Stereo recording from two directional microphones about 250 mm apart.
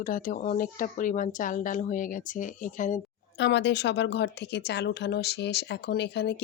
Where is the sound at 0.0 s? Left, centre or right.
Left.